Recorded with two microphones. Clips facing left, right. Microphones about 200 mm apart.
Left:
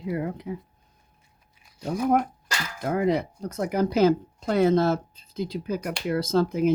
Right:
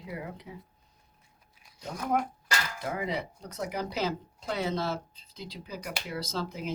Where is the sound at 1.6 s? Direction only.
10° left (ahead or behind).